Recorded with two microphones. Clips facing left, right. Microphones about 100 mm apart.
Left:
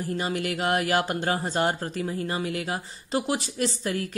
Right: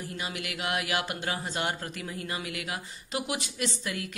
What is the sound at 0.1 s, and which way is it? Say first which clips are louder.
Speech: left 9 dB; 40° left (ahead or behind).